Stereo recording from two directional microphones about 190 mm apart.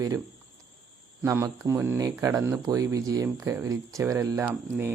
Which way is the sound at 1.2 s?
10° right (ahead or behind).